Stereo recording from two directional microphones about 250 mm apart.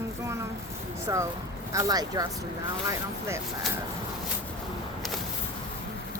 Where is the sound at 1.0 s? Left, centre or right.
Centre.